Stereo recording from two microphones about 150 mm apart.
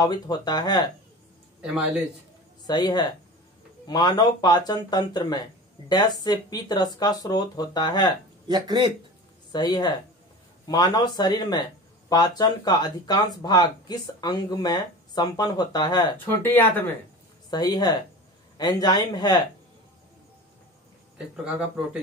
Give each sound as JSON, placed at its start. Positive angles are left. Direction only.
{"t": 0.0, "sound": "speech", "side_deg": 25}
{"t": 2.6, "sound": "speech", "side_deg": 25}
{"t": 8.5, "sound": "speech", "side_deg": -30}
{"t": 9.5, "sound": "speech", "side_deg": 30}
{"t": 16.4, "sound": "speech", "side_deg": 15}
{"t": 17.5, "sound": "speech", "side_deg": 25}
{"t": 21.5, "sound": "speech", "side_deg": -5}